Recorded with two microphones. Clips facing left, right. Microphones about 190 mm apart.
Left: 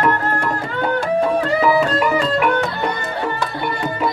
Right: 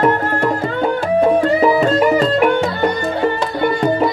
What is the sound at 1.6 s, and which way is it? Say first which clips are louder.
Music: right 3 dB; 30° right (ahead or behind).